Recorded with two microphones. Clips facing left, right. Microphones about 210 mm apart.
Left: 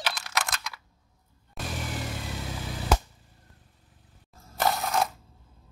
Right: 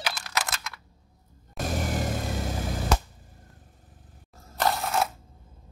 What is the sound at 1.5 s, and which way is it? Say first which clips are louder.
Vehicle: right 6 dB; 45° right (ahead or behind).